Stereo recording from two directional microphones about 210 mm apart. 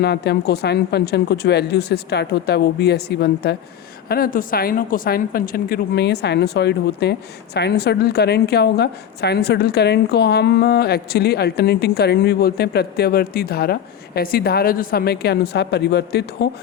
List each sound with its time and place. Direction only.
0.0 s a woman's voice: 50° left (ahead or behind)